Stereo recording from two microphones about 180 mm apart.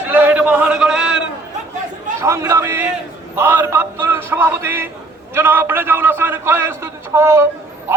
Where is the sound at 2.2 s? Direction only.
15° right (ahead or behind).